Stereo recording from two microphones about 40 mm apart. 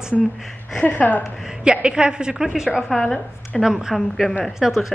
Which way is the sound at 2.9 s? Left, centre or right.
Centre.